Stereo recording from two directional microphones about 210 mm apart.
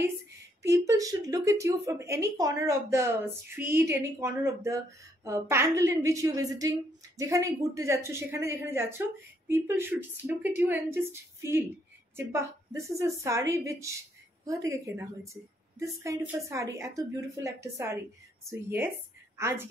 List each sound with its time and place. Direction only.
0.6 s a woman's voice: 15° right (ahead or behind)